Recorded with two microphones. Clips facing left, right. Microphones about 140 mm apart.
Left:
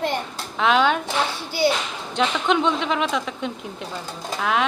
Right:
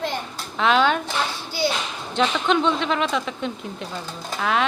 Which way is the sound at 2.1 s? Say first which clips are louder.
Even; 10° left (ahead or behind).